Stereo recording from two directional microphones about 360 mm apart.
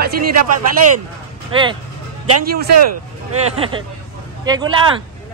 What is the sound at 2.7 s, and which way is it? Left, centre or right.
Speech, right.